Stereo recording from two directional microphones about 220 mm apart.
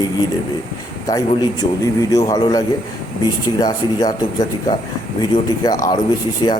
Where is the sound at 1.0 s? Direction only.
15° left (ahead or behind).